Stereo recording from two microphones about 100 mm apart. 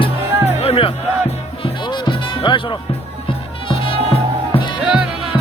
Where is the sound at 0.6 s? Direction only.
70° left (ahead or behind).